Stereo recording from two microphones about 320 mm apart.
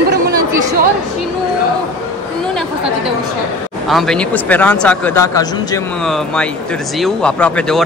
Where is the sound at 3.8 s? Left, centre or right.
Centre.